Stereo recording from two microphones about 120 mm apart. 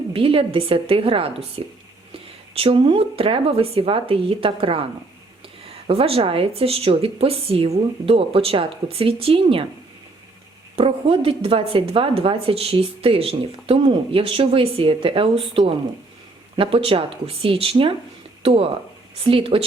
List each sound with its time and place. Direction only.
0.1 s a woman's voice: 50° right (ahead or behind)
10.8 s a woman's voice: 50° right (ahead or behind)